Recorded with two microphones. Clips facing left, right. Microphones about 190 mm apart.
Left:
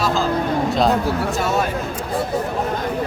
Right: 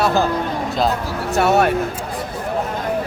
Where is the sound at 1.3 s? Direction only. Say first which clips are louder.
Right 5 dB; 65° right (ahead or behind).